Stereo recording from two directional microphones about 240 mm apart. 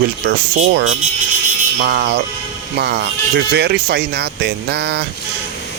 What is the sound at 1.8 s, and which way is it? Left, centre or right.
Speech, right.